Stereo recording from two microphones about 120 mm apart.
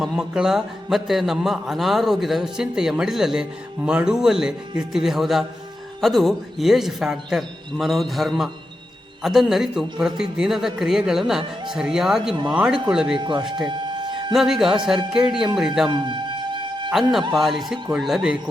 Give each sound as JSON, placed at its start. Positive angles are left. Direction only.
{"t": 0.0, "sound": "a man's voice", "side_deg": -5}
{"t": 13.1, "sound": "speech", "side_deg": -40}
{"t": 13.7, "sound": "a sound", "side_deg": -40}
{"t": 14.3, "sound": "a man's voice", "side_deg": -5}
{"t": 15.9, "sound": "music", "side_deg": -40}
{"t": 16.9, "sound": "a man's voice", "side_deg": 0}